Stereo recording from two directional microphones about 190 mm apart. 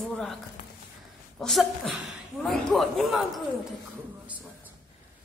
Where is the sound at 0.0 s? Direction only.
Centre (ahead or behind).